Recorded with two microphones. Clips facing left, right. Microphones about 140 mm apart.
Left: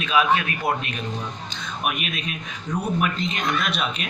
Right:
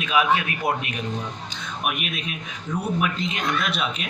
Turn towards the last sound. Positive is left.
turn(degrees=0)  # may be behind; listen again after turning